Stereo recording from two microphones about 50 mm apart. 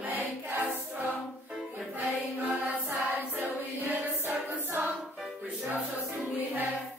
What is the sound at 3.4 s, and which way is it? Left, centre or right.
Choir, right.